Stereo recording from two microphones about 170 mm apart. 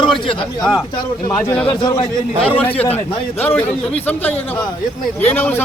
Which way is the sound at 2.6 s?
10° left (ahead or behind).